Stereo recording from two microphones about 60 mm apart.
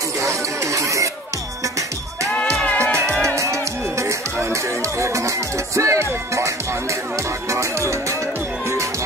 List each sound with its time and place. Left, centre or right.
0.2 s a sound: right
2.6 s music: left
3.3 s music: right